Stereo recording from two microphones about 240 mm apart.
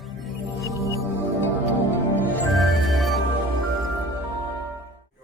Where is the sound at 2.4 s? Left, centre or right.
Centre.